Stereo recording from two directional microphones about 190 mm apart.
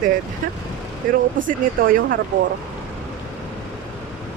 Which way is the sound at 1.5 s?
50° right (ahead or behind).